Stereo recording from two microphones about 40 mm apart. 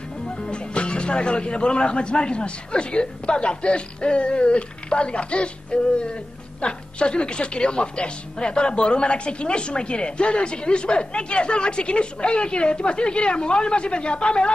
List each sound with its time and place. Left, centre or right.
0.5 s a woman's voice: left